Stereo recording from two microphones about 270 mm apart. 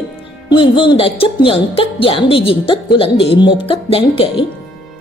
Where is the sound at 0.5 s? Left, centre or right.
Centre.